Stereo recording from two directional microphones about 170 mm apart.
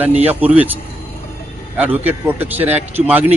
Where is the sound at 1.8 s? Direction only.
10° right (ahead or behind).